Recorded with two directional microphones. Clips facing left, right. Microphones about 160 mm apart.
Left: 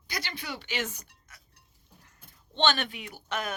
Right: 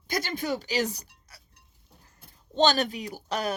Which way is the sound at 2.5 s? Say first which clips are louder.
Right 5 dB; 40° right (ahead or behind).